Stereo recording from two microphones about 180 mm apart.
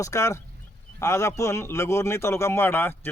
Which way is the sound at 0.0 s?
15° left (ahead or behind).